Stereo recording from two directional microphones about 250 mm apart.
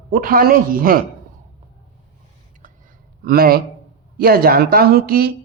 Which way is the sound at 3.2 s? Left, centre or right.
Right.